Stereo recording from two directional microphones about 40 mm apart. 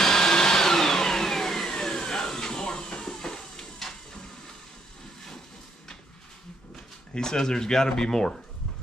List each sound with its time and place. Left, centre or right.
0.0 s vacuum cleaner: centre
7.2 s speech: centre